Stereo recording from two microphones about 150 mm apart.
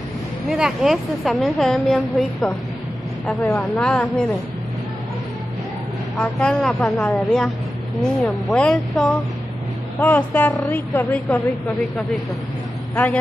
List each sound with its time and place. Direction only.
0.5 s a woman's voice: 5° right (ahead or behind)
6.1 s a woman's voice: 5° left (ahead or behind)
12.9 s speech: 10° left (ahead or behind)